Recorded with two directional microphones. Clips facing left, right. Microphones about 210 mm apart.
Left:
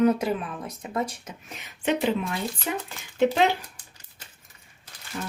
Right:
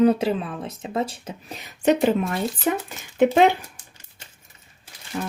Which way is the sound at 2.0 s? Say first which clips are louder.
Right 5 dB; 45° right (ahead or behind).